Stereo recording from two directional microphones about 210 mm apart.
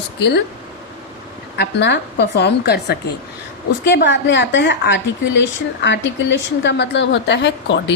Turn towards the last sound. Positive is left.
turn(degrees=55)  # may be behind; listen again after turning